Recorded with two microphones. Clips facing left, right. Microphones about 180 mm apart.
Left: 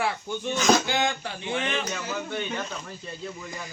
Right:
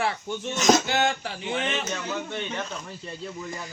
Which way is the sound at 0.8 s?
5° right (ahead or behind).